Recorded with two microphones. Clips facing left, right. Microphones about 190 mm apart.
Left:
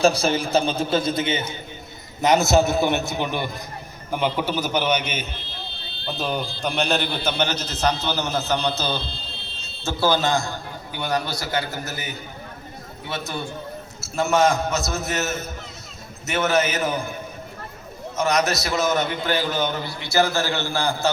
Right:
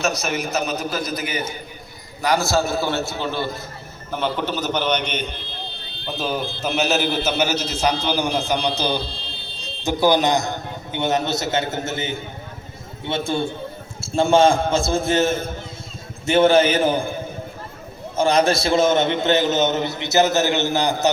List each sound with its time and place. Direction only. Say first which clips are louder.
0.0 s a man's voice: left 4 dB; 30° left (ahead or behind); by 17.2 s 30° right (ahead or behind)
18.2 s a man's voice: right 4 dB; 30° right (ahead or behind)